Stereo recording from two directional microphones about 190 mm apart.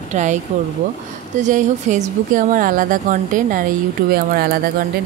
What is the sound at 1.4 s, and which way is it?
Speech, 40° right (ahead or behind).